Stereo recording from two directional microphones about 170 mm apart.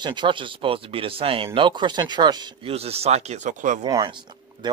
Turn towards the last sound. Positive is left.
turn(degrees=-25)  # may be behind; listen again after turning